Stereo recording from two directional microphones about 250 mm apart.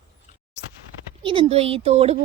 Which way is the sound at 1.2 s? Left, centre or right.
Centre.